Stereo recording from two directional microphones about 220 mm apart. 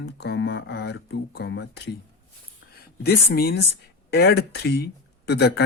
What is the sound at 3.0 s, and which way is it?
Speech, 45° left (ahead or behind).